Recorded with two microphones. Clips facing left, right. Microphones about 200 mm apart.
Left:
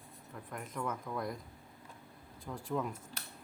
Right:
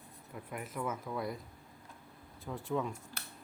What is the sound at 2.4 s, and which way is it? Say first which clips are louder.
Speech: right 1 dB; centre (ahead or behind).